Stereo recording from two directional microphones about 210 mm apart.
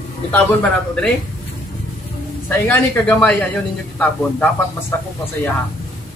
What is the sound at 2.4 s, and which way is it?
Speech, 10° left (ahead or behind).